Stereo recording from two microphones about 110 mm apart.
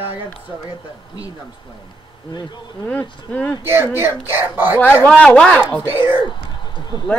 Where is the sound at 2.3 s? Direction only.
40° left (ahead or behind).